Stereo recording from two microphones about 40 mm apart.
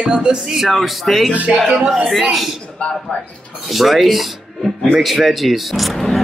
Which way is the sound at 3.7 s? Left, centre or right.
Centre.